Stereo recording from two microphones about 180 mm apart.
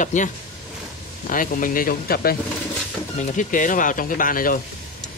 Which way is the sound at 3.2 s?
45° left (ahead or behind).